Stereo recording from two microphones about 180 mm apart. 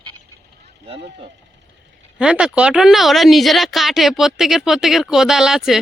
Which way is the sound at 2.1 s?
5° right (ahead or behind).